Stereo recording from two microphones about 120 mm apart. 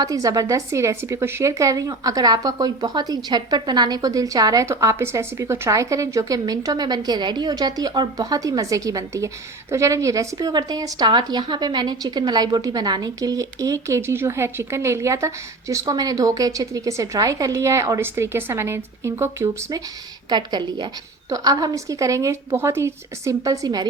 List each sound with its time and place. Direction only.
0.0 s a woman's voice: 30° right (ahead or behind)
20.3 s a woman's voice: 35° right (ahead or behind)